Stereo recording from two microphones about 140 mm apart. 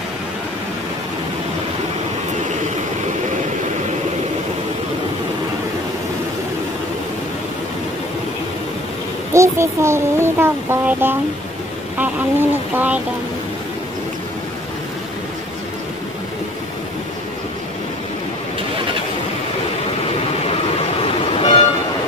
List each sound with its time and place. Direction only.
9.3 s speech: 20° right (ahead or behind)
21.0 s vehicle: 45° left (ahead or behind)